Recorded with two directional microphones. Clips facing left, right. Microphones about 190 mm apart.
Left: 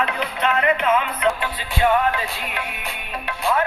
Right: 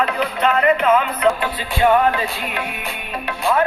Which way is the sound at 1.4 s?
35° right (ahead or behind).